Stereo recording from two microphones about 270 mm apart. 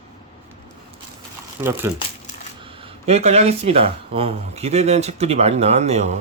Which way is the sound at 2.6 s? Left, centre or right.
Centre.